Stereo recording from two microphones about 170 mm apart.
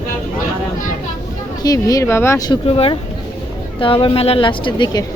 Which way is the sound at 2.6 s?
35° left (ahead or behind).